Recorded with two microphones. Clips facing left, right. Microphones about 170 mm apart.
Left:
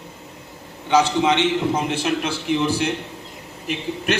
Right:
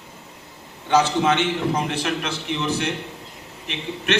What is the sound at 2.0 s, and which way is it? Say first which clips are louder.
A man's voice: left 3 dB; 30° left (ahead or behind).